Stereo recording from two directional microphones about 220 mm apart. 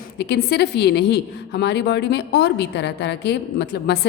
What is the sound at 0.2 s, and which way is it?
A woman's voice, 50° left (ahead or behind).